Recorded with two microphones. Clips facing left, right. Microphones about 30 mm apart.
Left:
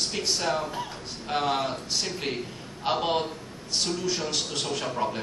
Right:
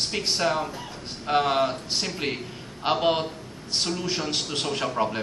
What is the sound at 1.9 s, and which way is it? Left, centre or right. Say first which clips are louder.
Speech: right 1 dB; right.